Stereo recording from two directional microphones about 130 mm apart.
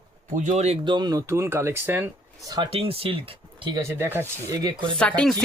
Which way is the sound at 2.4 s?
35° right (ahead or behind).